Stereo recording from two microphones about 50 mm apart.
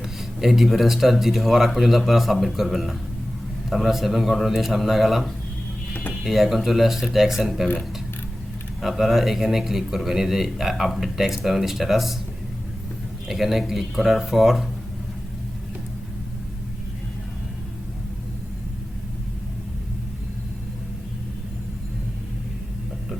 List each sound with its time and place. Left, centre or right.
0.4 s speech: centre
5.9 s mechanisms: left
6.2 s speech: centre
8.8 s speech: centre
13.2 s speech: centre